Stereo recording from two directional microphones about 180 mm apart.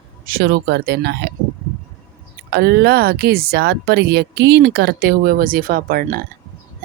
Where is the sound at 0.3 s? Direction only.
60° right (ahead or behind).